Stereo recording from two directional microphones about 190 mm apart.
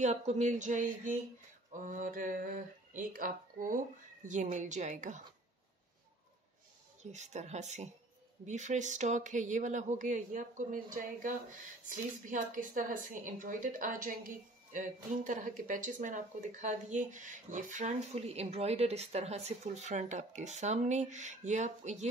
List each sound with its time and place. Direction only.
0.0 s speech: 35° right (ahead or behind)
7.0 s speech: 35° right (ahead or behind)